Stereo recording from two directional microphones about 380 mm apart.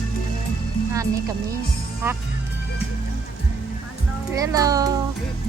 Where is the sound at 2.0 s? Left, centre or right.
Centre.